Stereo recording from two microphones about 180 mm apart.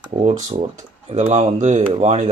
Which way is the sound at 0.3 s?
35° right (ahead or behind).